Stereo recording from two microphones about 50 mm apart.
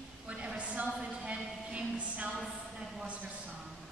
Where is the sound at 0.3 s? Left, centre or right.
Right.